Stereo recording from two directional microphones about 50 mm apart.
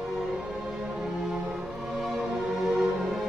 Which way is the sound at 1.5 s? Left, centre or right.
Centre.